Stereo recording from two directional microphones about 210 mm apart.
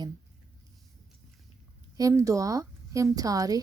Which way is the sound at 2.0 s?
15° right (ahead or behind).